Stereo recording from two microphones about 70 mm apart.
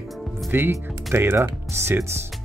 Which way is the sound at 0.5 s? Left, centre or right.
Right.